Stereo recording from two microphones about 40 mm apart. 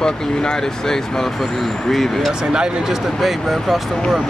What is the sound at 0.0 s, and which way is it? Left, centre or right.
Speech, centre.